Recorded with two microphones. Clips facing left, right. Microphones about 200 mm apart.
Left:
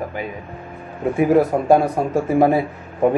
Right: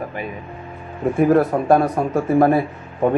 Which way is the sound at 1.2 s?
5° left (ahead or behind).